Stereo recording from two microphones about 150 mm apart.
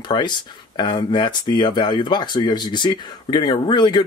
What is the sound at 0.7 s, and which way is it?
Speech, 30° left (ahead or behind).